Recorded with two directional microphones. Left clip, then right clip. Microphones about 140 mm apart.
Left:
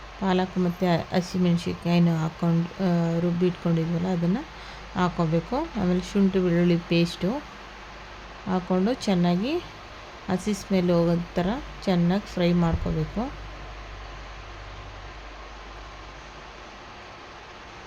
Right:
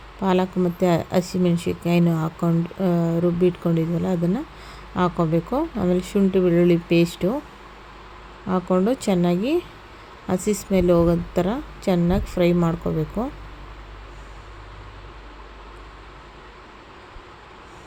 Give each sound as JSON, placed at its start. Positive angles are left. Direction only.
{"t": 0.2, "sound": "speech", "side_deg": -25}
{"t": 8.4, "sound": "speech", "side_deg": -15}